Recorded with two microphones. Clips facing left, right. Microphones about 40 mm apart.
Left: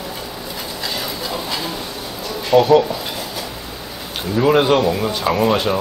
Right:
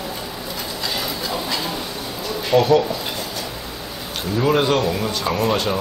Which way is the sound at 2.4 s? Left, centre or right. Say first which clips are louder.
Left 3 dB; centre.